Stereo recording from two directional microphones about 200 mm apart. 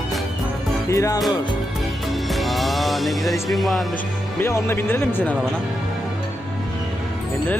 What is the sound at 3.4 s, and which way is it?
Speech, centre (ahead or behind).